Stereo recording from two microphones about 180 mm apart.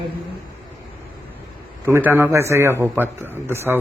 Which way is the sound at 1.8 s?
10° right (ahead or behind).